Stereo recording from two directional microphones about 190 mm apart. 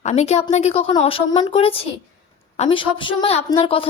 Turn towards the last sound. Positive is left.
turn(degrees=30)  # may be behind; listen again after turning